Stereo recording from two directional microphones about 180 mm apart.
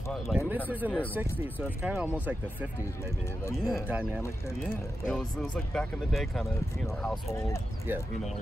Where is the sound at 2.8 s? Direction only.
15° left (ahead or behind).